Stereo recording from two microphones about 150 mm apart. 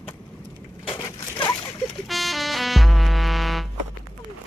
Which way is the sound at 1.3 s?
30° left (ahead or behind).